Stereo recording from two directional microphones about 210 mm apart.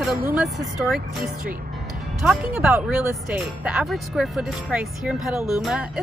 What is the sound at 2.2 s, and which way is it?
Speech, 5° right (ahead or behind).